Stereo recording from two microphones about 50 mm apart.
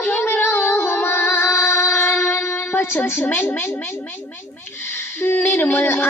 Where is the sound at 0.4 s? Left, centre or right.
Left.